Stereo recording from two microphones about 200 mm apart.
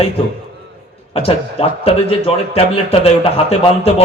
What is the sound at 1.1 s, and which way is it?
A man's voice, 30° left (ahead or behind).